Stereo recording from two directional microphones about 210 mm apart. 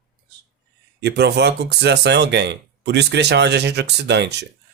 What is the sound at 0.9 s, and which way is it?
Speech, 50° right (ahead or behind).